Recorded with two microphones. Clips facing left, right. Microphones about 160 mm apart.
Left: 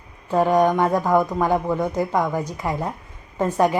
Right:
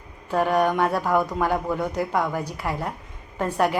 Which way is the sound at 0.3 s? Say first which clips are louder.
Left 4 dB; 15° left (ahead or behind).